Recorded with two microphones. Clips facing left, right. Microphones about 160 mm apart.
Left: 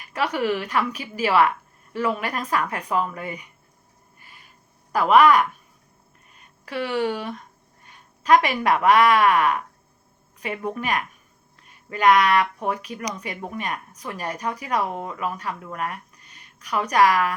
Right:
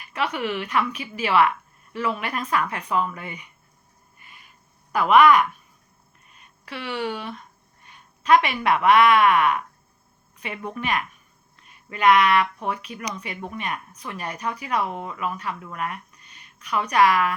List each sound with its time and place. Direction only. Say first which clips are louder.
0.1 s a woman's voice: left 3 dB; 40° left (ahead or behind)
4.9 s a woman's voice: even; 35° left (ahead or behind)
6.7 s a woman's voice: left 5 dB; 45° left (ahead or behind)